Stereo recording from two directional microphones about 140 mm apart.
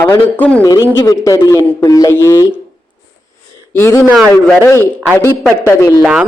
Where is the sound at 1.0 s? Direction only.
25° left (ahead or behind).